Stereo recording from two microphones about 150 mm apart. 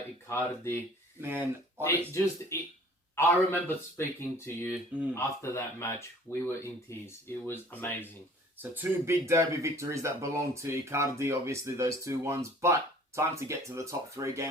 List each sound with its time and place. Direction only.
0.3 s speech: 15° left (ahead or behind)
1.2 s speech: 15° right (ahead or behind)
1.8 s speech: 20° left (ahead or behind)
8.7 s speech: 15° right (ahead or behind)